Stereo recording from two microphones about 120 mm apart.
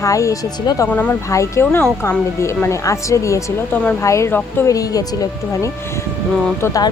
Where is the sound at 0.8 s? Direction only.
10° left (ahead or behind).